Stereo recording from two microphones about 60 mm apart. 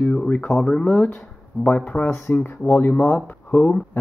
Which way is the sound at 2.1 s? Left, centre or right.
Left.